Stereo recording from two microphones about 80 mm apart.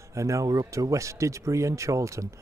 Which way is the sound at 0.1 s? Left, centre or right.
Right.